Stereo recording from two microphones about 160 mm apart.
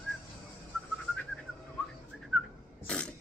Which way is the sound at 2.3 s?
Centre (ahead or behind).